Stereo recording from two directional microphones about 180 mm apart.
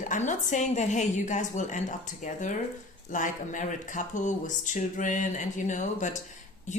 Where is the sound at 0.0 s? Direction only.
45° left (ahead or behind).